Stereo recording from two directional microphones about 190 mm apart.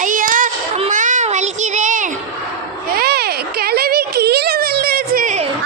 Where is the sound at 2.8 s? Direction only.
55° right (ahead or behind).